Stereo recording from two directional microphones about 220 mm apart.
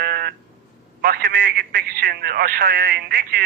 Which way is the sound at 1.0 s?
40° right (ahead or behind).